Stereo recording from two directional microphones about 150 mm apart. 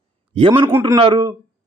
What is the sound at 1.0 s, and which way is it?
Speech, 35° right (ahead or behind).